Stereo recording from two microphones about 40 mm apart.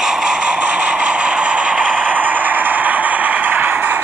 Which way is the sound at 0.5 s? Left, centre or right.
Right.